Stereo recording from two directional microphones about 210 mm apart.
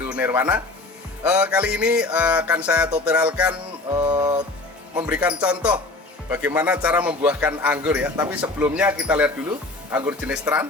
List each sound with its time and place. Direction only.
0.0 s speech: 10° right (ahead or behind)
1.2 s music: 5° right (ahead or behind)
3.1 s a man's voice: 5° right (ahead or behind)
3.9 s music: 20° right (ahead or behind)
4.9 s a man's voice: 5° right (ahead or behind)